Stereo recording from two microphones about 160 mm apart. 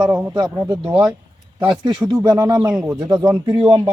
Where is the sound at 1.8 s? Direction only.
25° right (ahead or behind).